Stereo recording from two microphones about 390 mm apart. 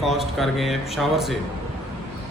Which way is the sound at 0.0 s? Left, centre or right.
Centre.